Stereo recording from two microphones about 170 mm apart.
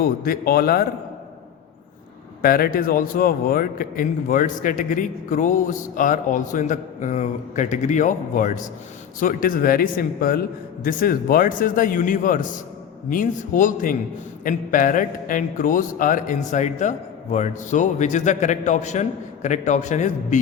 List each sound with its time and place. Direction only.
0.0 s a man's voice: 60° left (ahead or behind)
2.4 s a man's voice: 60° left (ahead or behind)